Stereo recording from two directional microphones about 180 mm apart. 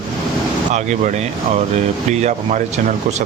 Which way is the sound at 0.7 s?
40° right (ahead or behind).